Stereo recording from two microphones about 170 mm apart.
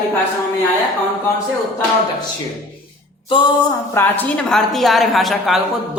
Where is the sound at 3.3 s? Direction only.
30° left (ahead or behind).